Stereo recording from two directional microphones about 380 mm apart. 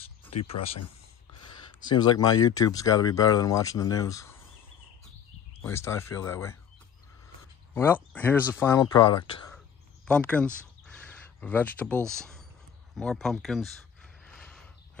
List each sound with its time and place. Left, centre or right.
0.3 s speech: left
1.8 s speech: centre
5.6 s speech: centre
7.7 s speech: centre
14.2 s mechanisms: centre